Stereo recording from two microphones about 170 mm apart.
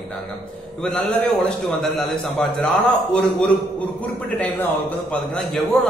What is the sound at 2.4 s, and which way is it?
A man's voice, 5° left (ahead or behind).